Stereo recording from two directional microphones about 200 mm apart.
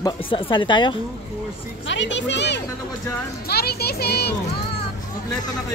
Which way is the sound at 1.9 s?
65° left (ahead or behind).